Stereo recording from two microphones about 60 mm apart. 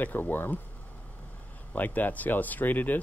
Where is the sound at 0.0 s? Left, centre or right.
Left.